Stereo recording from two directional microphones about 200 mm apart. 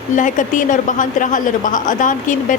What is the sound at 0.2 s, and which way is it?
A woman's voice, 40° left (ahead or behind).